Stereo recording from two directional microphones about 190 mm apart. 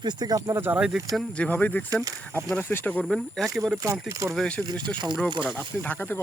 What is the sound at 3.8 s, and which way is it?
Speech, 15° right (ahead or behind).